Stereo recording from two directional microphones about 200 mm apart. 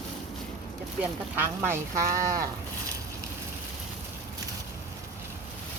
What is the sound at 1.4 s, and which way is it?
Speech, 10° right (ahead or behind).